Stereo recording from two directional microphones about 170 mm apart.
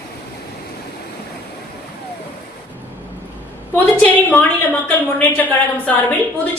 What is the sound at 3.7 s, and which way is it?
A man's voice, 10° left (ahead or behind).